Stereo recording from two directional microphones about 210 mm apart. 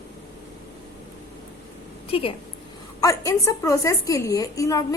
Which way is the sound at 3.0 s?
15° left (ahead or behind).